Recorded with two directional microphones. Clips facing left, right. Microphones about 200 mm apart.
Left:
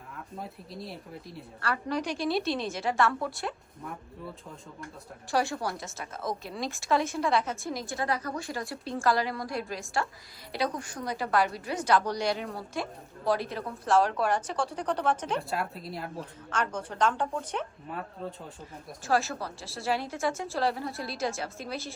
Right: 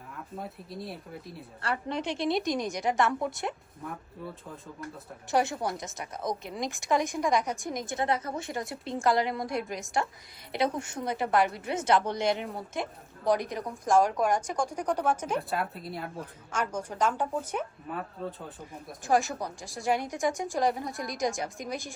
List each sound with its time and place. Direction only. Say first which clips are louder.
0.3 s speech: right 2 dB; centre (ahead or behind)
1.6 s a woman's voice: left 1 dB; 25° right (ahead or behind)
3.8 s speech: right 1 dB; centre (ahead or behind)
5.3 s a woman's voice: right 1 dB; 20° right (ahead or behind); by 18.9 s centre (ahead or behind)
19.0 s a woman's voice: right 2 dB; 15° right (ahead or behind)